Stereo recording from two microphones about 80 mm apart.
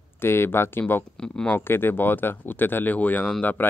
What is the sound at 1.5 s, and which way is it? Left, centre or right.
Speech, left.